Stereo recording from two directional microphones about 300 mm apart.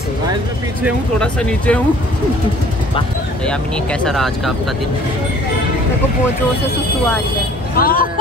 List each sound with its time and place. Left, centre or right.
0.8 s speech: centre
4.0 s speech: centre
7.7 s speech: left